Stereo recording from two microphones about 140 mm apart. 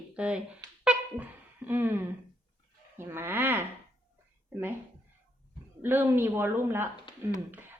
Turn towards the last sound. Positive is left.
turn(degrees=-15)  # may be behind; listen again after turning